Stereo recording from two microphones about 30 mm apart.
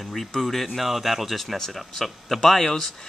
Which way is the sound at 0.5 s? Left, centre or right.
Centre.